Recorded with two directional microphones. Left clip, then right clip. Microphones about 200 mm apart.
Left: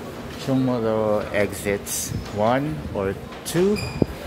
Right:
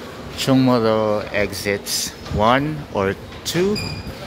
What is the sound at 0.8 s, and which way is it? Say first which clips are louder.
Speech: right 3 dB; 5° right (ahead or behind).